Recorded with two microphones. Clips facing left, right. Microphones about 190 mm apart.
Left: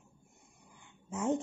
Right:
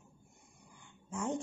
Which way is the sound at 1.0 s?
20° left (ahead or behind).